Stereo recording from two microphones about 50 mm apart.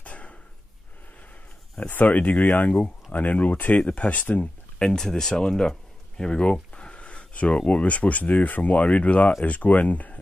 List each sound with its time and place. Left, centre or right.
0.0 s a sound: left
1.8 s speech: left
4.7 s speech: centre; by 10.1 s left